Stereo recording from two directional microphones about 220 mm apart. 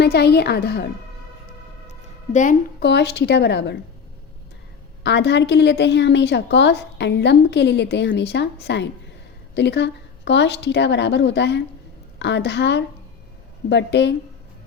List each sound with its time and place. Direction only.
0.0 s a woman's voice: 50° left (ahead or behind)
1.9 s a sound: 35° left (ahead or behind)
2.8 s a woman's voice: 50° left (ahead or behind)
5.0 s a woman's voice: 50° left (ahead or behind)